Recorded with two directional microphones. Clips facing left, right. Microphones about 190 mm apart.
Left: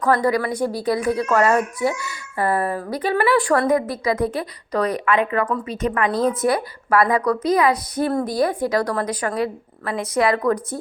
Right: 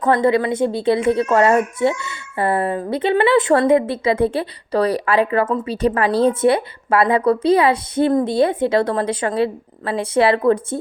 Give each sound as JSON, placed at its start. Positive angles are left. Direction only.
{"t": 0.0, "sound": "speech", "side_deg": -25}